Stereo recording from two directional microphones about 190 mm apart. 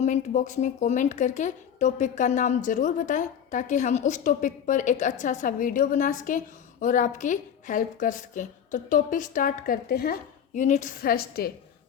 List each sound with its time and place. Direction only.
0.0 s a woman's voice: 40° left (ahead or behind)